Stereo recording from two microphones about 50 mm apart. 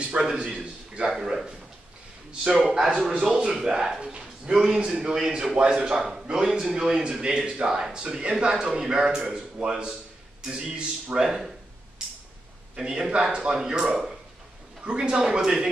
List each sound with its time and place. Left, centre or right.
0.0 s a man's voice: centre
2.7 s speech: centre
12.7 s speech: centre